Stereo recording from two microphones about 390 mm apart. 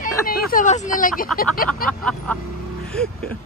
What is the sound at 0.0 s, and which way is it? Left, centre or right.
Speech, left.